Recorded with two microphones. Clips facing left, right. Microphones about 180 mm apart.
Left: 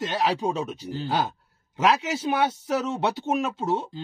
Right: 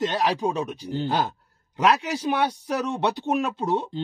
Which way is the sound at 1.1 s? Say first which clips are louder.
Left 1 dB; centre (ahead or behind).